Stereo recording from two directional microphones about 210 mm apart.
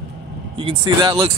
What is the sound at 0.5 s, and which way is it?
Speech, 25° right (ahead or behind).